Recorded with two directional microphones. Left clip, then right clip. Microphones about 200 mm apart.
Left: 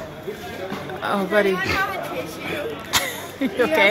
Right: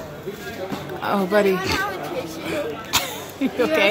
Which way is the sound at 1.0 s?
15° right (ahead or behind).